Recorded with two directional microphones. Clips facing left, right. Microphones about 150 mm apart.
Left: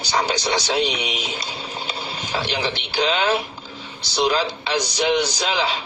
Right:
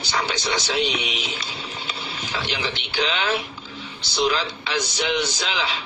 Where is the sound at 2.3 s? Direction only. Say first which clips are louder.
Left 4 dB; 35° left (ahead or behind).